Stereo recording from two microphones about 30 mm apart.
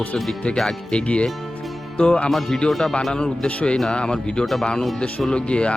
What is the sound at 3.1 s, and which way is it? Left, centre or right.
Speech, left.